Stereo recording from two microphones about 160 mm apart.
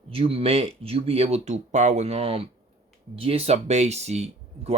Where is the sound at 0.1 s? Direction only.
35° right (ahead or behind).